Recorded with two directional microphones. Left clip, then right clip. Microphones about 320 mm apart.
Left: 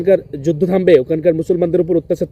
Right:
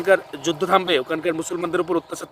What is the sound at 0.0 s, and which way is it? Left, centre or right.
Speech, right.